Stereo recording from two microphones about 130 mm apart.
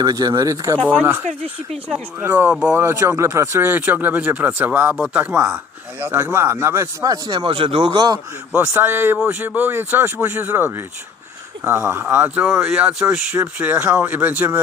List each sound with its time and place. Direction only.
0.0 s speech: 30° right (ahead or behind)
1.9 s speech: 15° right (ahead or behind)
2.7 s speech: 20° right (ahead or behind); by 7.9 s 45° right (ahead or behind)
7.9 s a man's voice: 30° right (ahead or behind)
8.5 s speech: 15° right (ahead or behind)